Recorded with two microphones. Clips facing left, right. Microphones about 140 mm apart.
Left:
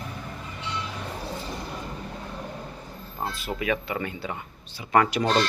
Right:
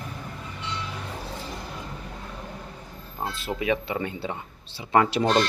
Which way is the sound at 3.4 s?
25° right (ahead or behind).